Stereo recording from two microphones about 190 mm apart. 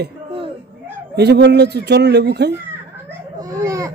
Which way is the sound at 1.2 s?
60° right (ahead or behind).